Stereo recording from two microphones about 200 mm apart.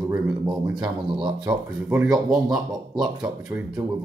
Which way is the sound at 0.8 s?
25° right (ahead or behind).